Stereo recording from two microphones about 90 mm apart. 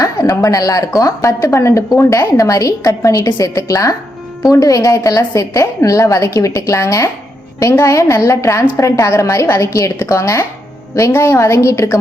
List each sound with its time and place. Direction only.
0.0 s a woman's voice: 45° left (ahead or behind)